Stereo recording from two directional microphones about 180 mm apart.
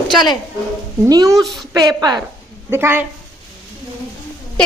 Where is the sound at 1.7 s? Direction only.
20° right (ahead or behind).